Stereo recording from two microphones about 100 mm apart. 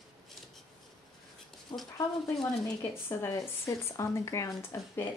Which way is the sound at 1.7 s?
60° left (ahead or behind).